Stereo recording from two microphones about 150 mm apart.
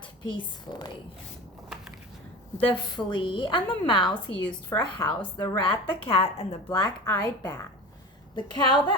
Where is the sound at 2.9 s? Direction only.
35° left (ahead or behind).